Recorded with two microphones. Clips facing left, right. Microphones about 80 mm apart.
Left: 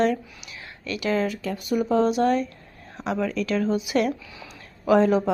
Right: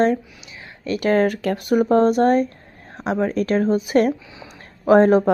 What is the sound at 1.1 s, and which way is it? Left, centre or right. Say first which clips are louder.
Speech: right 7 dB; right.